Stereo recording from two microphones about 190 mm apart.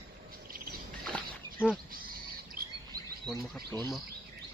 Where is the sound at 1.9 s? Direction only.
50° right (ahead or behind).